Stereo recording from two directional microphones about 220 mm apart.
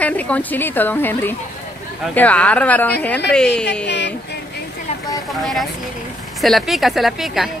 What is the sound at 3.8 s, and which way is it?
Speech, 50° left (ahead or behind).